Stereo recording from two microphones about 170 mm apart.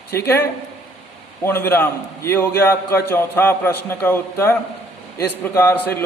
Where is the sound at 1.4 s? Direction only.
15° left (ahead or behind).